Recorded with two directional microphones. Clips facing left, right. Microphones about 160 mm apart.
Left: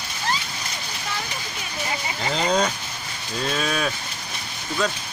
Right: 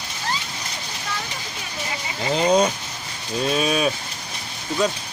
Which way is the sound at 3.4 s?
20° right (ahead or behind).